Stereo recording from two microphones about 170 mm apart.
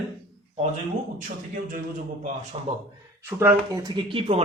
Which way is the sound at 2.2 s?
40° right (ahead or behind).